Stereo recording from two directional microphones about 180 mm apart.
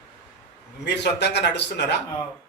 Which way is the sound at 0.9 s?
70° left (ahead or behind).